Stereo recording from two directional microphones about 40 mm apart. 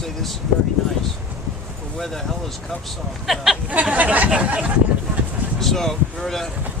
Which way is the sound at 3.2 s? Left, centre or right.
Centre.